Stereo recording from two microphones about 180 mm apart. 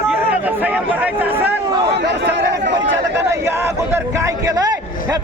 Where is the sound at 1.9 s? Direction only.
70° right (ahead or behind).